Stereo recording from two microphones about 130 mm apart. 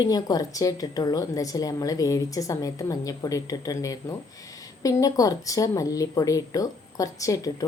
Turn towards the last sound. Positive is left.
turn(degrees=25)  # may be behind; listen again after turning